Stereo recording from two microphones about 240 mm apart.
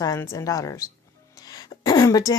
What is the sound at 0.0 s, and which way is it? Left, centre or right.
Speech, centre.